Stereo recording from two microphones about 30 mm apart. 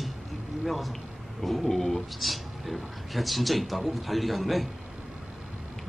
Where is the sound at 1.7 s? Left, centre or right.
Centre.